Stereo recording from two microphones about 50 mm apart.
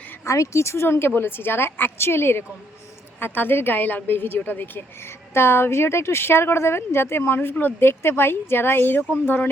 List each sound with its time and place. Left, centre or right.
0.3 s speech: left
0.9 s a woman's voice: left
5.0 s a woman's voice: left